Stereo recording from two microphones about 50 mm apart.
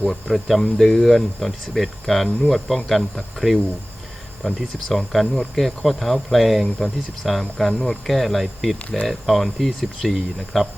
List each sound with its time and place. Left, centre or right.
0.1 s speech: centre